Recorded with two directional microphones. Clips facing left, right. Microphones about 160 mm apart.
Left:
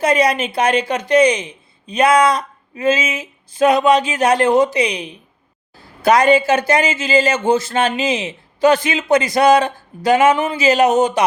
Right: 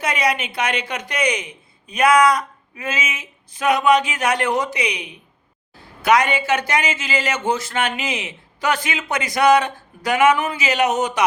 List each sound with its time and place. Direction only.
0.0 s speech: 35° left (ahead or behind)